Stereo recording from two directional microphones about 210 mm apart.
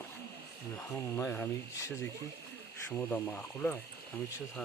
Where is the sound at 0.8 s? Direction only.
10° left (ahead or behind).